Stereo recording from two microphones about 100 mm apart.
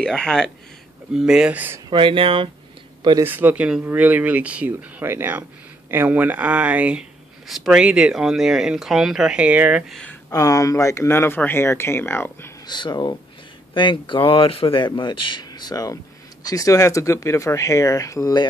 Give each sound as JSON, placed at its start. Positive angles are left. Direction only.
{"t": 0.0, "sound": "speech", "side_deg": 5}
{"t": 1.1, "sound": "speech", "side_deg": -5}
{"t": 1.9, "sound": "speech", "side_deg": -55}
{"t": 3.3, "sound": "speech", "side_deg": -20}
{"t": 10.3, "sound": "speech", "side_deg": 35}
{"t": 12.6, "sound": "speech", "side_deg": 45}